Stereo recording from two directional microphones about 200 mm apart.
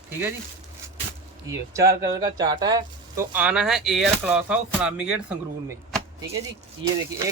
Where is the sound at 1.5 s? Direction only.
15° right (ahead or behind).